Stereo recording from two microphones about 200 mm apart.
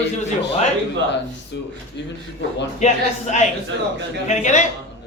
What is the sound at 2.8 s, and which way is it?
A man's voice, 35° left (ahead or behind).